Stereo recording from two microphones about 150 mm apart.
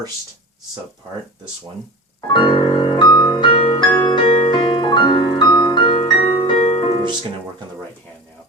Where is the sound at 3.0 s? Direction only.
30° left (ahead or behind).